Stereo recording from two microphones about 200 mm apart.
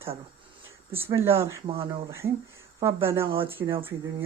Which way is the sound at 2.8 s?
15° right (ahead or behind).